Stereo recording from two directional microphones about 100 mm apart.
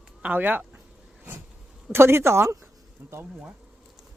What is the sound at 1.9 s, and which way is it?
Speech, 25° right (ahead or behind).